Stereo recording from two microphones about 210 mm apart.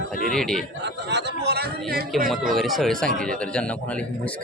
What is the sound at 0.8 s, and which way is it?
Speech, 55° right (ahead or behind).